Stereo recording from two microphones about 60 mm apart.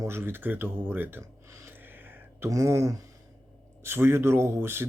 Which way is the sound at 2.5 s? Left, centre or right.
Right.